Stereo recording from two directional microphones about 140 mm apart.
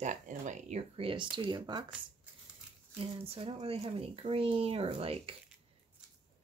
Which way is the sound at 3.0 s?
45° right (ahead or behind).